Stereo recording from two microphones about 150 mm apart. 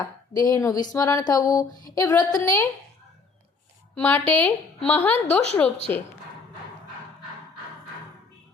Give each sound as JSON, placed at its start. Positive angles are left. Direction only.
{"t": 0.0, "sound": "speech", "side_deg": 25}
{"t": 3.9, "sound": "a woman's voice", "side_deg": 10}